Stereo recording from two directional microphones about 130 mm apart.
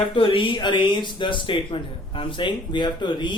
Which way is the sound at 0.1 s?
40° left (ahead or behind).